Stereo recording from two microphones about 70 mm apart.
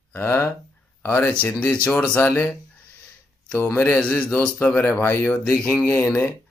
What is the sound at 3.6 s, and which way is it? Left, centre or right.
Speech, left.